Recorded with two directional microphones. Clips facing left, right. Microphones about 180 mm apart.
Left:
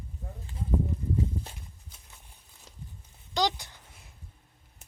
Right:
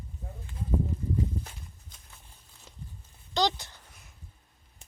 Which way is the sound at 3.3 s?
10° left (ahead or behind).